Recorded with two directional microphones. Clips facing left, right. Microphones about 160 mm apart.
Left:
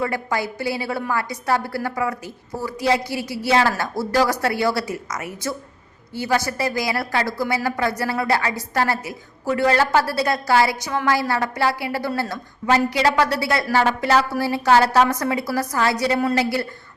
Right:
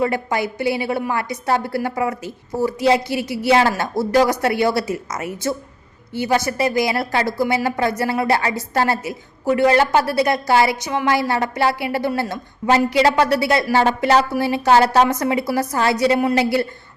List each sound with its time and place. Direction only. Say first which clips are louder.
0.0 s a woman's voice: right 3 dB; 20° right (ahead or behind)